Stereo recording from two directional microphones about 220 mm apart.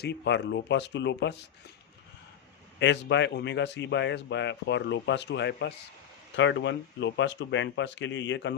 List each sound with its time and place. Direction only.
0.0 s a man's voice: 50° left (ahead or behind)
2.7 s a man's voice: 55° left (ahead or behind)